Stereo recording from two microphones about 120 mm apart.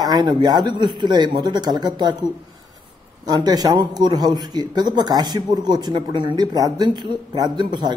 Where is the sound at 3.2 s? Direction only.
35° right (ahead or behind).